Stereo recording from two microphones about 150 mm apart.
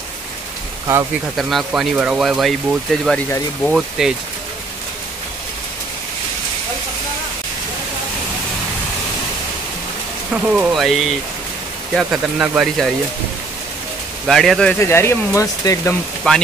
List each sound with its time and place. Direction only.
1.3 s speech: centre (ahead or behind)
10.3 s speech: 10° right (ahead or behind)
14.2 s speech: centre (ahead or behind)
14.8 s speech: 15° left (ahead or behind)
16.3 s speech: 5° left (ahead or behind)